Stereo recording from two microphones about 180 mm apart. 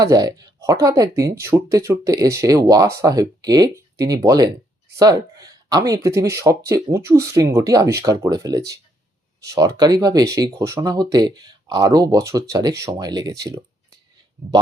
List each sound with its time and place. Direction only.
0.0 s speech: 20° right (ahead or behind)